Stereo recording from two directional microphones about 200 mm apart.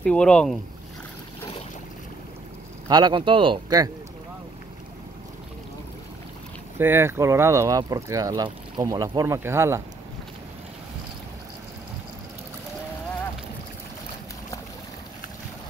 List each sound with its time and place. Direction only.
0.0 s speech: 5° left (ahead or behind)
2.9 s speech: 20° right (ahead or behind)
6.8 s speech: 10° right (ahead or behind)